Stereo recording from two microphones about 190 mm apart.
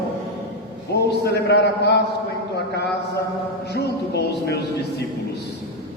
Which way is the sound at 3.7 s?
60° left (ahead or behind).